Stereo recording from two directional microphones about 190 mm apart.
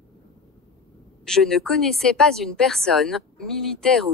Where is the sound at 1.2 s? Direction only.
5° left (ahead or behind).